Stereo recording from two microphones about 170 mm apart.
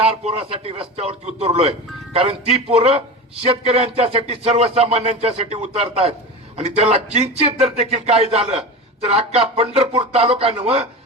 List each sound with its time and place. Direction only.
0.1 s speech: 35° right (ahead or behind)